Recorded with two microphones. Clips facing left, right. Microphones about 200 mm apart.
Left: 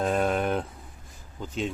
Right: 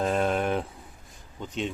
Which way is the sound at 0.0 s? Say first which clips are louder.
Even; centre (ahead or behind).